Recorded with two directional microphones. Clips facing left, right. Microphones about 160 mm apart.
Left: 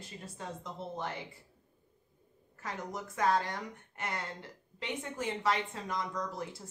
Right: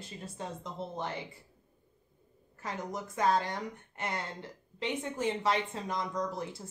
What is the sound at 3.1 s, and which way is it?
Speech, 25° right (ahead or behind).